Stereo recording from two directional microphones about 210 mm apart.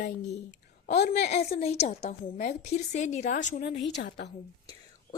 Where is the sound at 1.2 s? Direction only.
30° left (ahead or behind).